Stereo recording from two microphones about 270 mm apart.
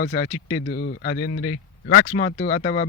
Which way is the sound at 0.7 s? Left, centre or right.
Left.